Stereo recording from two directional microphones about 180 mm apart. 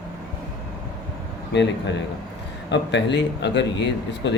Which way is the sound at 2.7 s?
75° left (ahead or behind).